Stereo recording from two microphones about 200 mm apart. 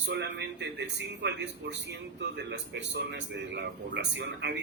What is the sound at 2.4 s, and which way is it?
A man's voice, 60° right (ahead or behind).